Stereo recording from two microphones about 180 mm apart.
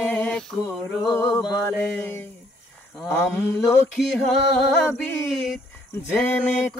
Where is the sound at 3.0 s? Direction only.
10° left (ahead or behind).